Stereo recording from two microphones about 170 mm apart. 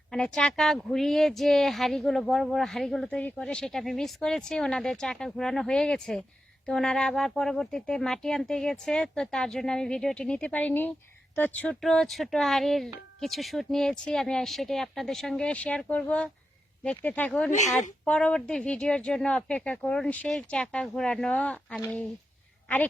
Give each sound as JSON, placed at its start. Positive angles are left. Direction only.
{"t": 0.1, "sound": "speech", "side_deg": 5}
{"t": 17.5, "sound": "speech", "side_deg": 45}
{"t": 18.0, "sound": "speech", "side_deg": 5}